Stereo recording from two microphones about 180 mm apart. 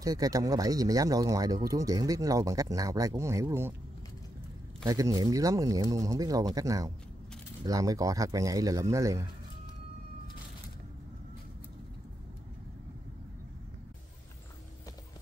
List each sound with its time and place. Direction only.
0.0 s speech: 20° right (ahead or behind)
4.8 s speech: 20° right (ahead or behind)